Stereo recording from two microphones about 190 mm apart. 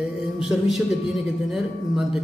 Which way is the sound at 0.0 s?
5° right (ahead or behind).